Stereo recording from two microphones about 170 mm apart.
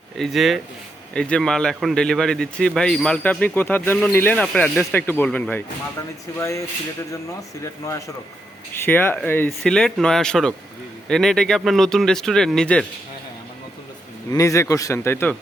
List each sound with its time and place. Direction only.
0.2 s a man's voice: centre (ahead or behind)
14.3 s speech: 20° left (ahead or behind)